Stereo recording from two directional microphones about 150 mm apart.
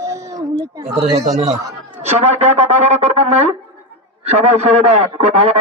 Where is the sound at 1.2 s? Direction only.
50° right (ahead or behind).